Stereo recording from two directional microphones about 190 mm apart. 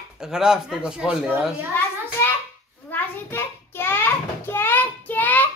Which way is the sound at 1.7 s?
10° left (ahead or behind).